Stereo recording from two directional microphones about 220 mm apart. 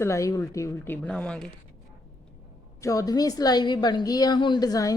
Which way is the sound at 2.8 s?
15° left (ahead or behind).